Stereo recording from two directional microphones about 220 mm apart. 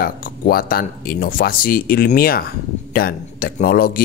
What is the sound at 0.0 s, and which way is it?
A man's voice, 40° left (ahead or behind).